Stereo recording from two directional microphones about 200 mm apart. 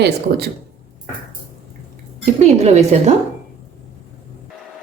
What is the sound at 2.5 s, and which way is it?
Speech, 35° right (ahead or behind).